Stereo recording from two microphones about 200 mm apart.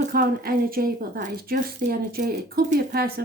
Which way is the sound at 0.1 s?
45° right (ahead or behind).